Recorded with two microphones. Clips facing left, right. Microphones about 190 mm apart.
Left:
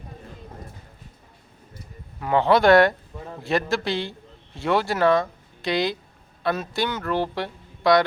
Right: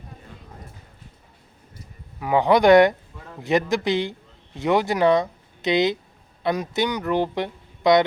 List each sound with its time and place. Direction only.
2.1 s speech: 10° right (ahead or behind)